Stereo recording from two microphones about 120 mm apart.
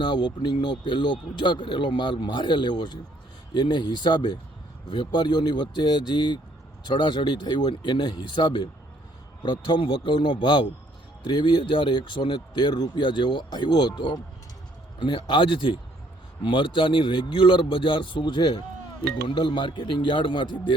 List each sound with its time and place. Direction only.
0.0 s a man's voice: 40° left (ahead or behind)